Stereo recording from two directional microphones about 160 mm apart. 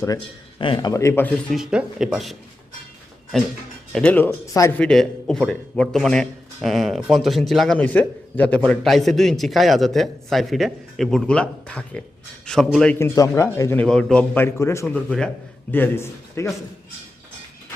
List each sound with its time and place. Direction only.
0.6 s speech: 30° left (ahead or behind); by 1.4 s 10° left (ahead or behind)
1.5 s a man's voice: 5° right (ahead or behind)
3.3 s a man's voice: centre (ahead or behind)